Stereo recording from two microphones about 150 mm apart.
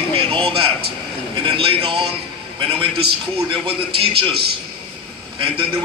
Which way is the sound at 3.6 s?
35° right (ahead or behind).